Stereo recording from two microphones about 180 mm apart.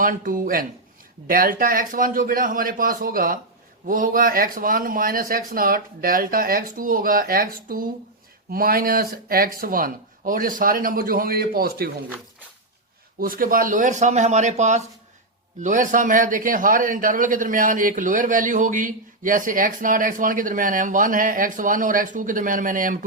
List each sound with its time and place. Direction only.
0.0 s a man's voice: 50° right (ahead or behind)
13.1 s a man's voice: 55° right (ahead or behind)